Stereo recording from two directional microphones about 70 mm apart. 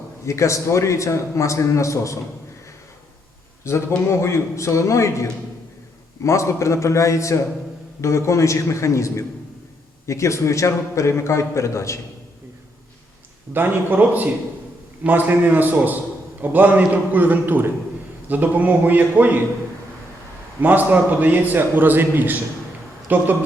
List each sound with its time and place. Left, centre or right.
0.3 s a man's voice: left
3.6 s a man's voice: left
13.5 s a man's voice: right
20.6 s a man's voice: right